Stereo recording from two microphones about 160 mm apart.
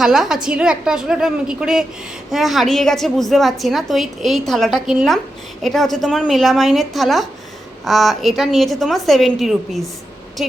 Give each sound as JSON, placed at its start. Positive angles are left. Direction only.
{"t": 0.0, "sound": "a woman's voice", "side_deg": 0}